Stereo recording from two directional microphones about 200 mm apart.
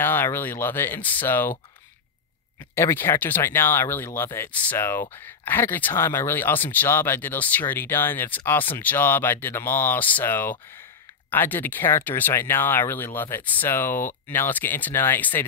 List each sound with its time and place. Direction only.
0.0 s speech: 10° left (ahead or behind)
2.7 s speech: 10° left (ahead or behind)